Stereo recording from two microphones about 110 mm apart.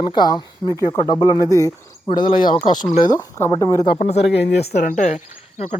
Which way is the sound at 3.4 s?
25° left (ahead or behind).